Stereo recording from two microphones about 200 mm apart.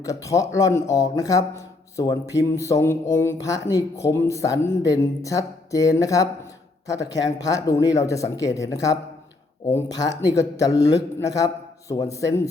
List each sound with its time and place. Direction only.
0.0 s speech: 15° left (ahead or behind)